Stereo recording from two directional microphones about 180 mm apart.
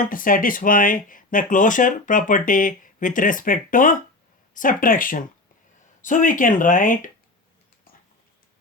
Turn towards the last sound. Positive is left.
turn(degrees=45)  # may be behind; listen again after turning